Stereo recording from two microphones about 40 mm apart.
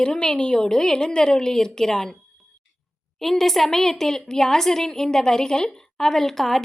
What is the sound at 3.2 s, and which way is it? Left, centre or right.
A woman's voice, centre.